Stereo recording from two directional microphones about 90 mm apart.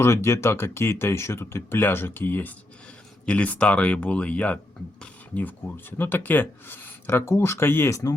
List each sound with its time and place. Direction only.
0.0 s speech: 30° left (ahead or behind)